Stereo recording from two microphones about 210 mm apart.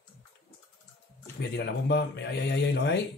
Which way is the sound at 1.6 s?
55° left (ahead or behind).